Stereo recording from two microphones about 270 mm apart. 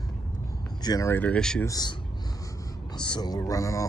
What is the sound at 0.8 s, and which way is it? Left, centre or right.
Speech, centre.